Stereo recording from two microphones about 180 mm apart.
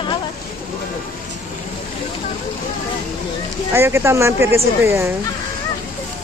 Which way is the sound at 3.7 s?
15° right (ahead or behind).